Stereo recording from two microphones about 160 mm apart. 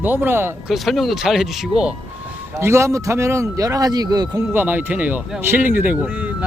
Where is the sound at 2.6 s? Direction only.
15° right (ahead or behind).